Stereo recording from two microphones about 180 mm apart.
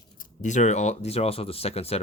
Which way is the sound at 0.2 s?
45° left (ahead or behind).